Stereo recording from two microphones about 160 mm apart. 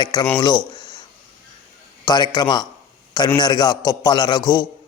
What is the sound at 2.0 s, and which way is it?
Speech, 25° left (ahead or behind).